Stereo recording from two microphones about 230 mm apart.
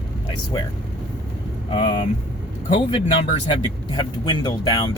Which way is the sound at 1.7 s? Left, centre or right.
Left.